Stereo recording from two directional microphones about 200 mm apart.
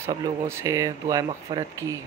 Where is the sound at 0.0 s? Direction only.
15° right (ahead or behind).